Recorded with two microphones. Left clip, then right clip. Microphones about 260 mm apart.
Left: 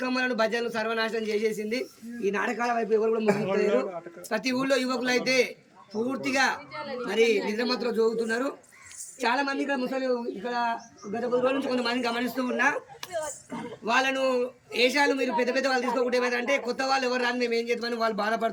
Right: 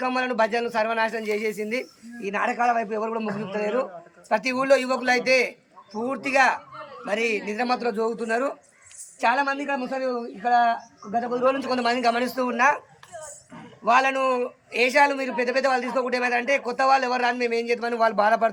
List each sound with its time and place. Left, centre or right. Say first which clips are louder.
0.0 s a man's voice: right 3 dB; centre
13.8 s a man's voice: right 5 dB; centre